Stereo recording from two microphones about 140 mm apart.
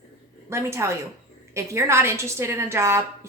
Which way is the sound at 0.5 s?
20° right (ahead or behind).